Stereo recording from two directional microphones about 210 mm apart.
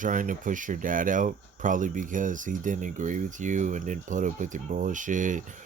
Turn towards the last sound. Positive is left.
turn(degrees=-35)  # may be behind; listen again after turning